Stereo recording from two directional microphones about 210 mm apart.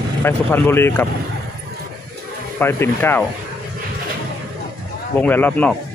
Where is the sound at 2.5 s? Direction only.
10° left (ahead or behind).